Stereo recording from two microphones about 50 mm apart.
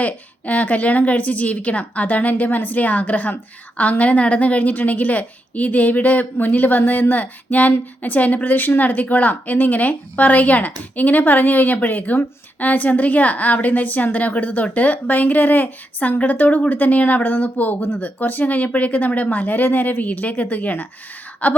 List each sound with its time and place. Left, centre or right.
0.0 s a woman's voice: left